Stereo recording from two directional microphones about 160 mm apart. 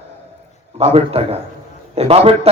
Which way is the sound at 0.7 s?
35° right (ahead or behind).